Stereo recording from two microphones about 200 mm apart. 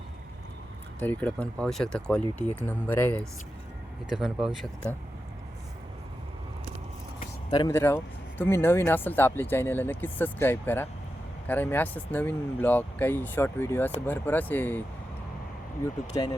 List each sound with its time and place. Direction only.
0.9 s speech: 10° left (ahead or behind)
4.1 s speech: centre (ahead or behind)
7.5 s speech: 20° left (ahead or behind)
7.8 s speech: 10° left (ahead or behind)